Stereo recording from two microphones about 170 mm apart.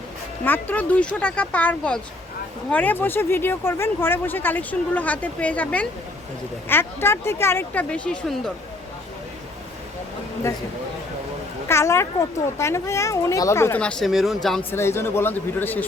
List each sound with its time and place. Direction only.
0.4 s speech: 10° left (ahead or behind)
11.7 s speech: 15° left (ahead or behind)
14.7 s speech: 15° left (ahead or behind)